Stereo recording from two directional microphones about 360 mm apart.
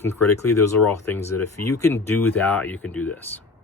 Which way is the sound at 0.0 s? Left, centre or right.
Centre.